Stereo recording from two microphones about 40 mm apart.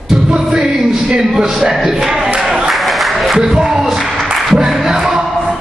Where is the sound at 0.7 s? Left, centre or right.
Centre.